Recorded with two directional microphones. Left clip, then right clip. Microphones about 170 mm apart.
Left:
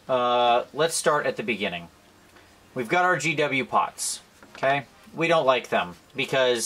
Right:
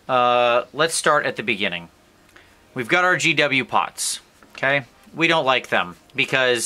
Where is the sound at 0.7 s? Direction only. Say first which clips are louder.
Right 4 dB; 25° right (ahead or behind).